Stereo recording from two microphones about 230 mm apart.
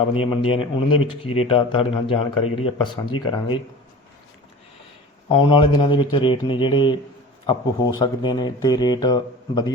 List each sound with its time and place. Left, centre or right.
0.1 s a man's voice: left
5.3 s a man's voice: left